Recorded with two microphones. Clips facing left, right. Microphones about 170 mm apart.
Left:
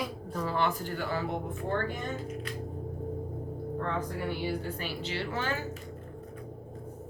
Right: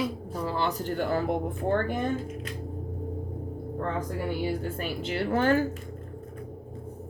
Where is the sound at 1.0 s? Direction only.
50° right (ahead or behind).